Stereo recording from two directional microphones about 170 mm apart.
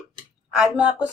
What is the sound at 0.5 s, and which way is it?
Speech, 5° right (ahead or behind).